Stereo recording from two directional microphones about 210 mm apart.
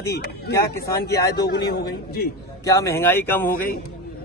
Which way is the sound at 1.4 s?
50° left (ahead or behind).